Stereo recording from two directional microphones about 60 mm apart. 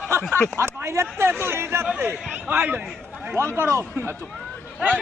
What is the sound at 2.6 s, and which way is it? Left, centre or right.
Speech, right.